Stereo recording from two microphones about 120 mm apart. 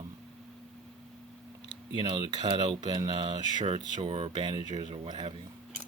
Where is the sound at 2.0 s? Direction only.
40° right (ahead or behind).